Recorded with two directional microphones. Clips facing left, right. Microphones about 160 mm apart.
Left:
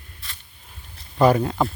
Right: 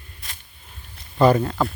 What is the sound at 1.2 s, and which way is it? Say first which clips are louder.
Speech: right 1 dB; 10° left (ahead or behind).